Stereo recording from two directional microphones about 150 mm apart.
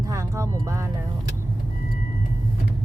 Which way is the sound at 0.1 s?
20° right (ahead or behind).